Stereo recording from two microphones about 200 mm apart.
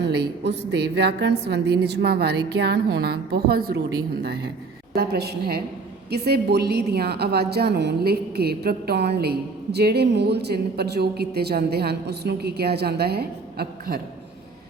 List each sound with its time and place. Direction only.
0.0 s a woman's voice: 55° right (ahead or behind)
4.9 s a woman's voice: 55° right (ahead or behind)